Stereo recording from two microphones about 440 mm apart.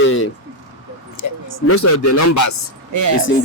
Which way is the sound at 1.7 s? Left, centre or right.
Left.